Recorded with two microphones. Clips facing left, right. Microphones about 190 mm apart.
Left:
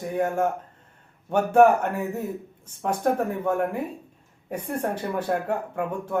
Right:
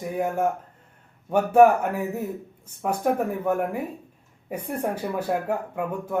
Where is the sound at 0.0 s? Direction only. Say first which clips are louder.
Left 1 dB; 5° right (ahead or behind).